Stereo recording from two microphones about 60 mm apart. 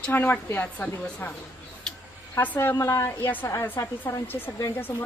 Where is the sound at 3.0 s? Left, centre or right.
Left.